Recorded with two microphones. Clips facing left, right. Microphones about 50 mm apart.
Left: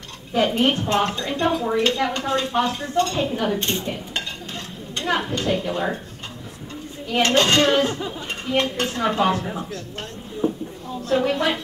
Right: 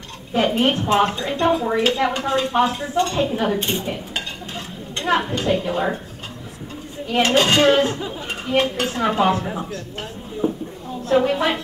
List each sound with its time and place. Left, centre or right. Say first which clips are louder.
0.4 s speech: right 1 dB; centre
7.2 s speech: right 1 dB; centre
10.4 s a sound: right 1 dB; centre
11.1 s speech: right 3 dB; centre